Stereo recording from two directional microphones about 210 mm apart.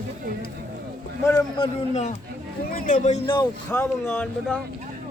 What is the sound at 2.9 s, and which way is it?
Speech, 30° left (ahead or behind).